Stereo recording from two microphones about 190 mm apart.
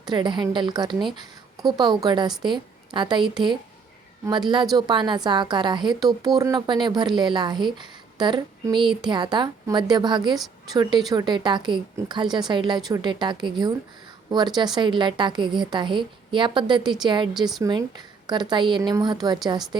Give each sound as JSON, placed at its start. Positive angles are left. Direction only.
{"t": 0.0, "sound": "a woman's voice", "side_deg": -25}
{"t": 8.8, "sound": "speech", "side_deg": 0}
{"t": 9.0, "sound": "a woman's voice", "side_deg": -25}